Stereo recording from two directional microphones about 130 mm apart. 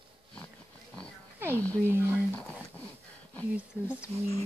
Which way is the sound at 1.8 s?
20° right (ahead or behind).